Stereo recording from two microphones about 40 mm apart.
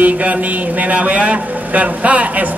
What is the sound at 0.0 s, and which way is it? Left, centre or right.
A man's voice, right.